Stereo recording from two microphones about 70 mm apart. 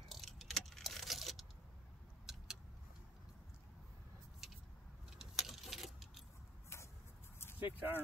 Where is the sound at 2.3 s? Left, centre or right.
Centre.